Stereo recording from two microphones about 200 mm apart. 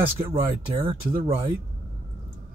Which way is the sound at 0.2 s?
25° right (ahead or behind).